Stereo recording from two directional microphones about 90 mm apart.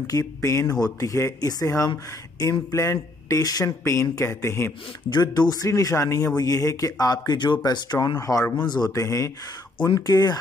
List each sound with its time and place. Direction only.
0.0 s speech: 40° left (ahead or behind)
5.1 s speech: 50° left (ahead or behind)
5.7 s speech: 35° left (ahead or behind); by 8.2 s 50° left (ahead or behind)
8.2 s speech: 35° left (ahead or behind)
8.6 s speech: 50° left (ahead or behind)
8.9 s speech: 35° left (ahead or behind)